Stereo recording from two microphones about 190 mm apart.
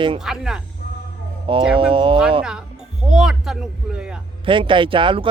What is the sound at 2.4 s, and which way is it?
Speech, 5° right (ahead or behind).